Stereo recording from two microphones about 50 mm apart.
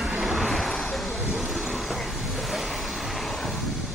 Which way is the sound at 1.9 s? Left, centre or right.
Centre.